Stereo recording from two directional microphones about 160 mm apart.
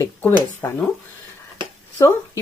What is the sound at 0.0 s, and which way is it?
Speech, 15° left (ahead or behind).